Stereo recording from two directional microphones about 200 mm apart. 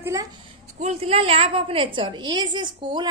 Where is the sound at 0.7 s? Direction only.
35° right (ahead or behind).